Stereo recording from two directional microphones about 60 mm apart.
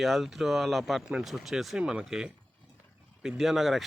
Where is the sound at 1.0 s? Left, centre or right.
Centre.